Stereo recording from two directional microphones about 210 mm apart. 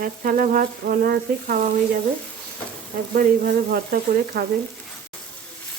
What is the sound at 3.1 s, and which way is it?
Speech, 45° right (ahead or behind).